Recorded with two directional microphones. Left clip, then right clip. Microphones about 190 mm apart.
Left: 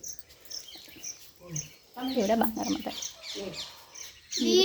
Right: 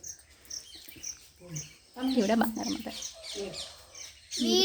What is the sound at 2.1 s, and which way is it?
Speech, 30° right (ahead or behind).